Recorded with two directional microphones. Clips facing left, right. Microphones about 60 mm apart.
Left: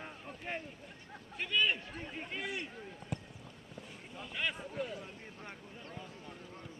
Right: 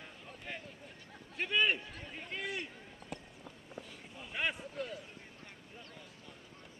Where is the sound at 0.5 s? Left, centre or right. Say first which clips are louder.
Left 5 dB; left.